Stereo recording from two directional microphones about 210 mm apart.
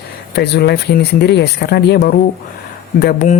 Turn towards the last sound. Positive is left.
turn(degrees=35)  # may be behind; listen again after turning